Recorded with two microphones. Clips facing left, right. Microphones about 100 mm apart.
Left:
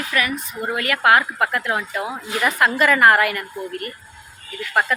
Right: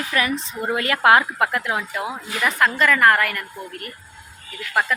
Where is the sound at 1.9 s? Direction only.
Centre (ahead or behind).